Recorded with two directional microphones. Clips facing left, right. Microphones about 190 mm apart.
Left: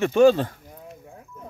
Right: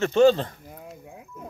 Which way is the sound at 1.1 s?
10° right (ahead or behind).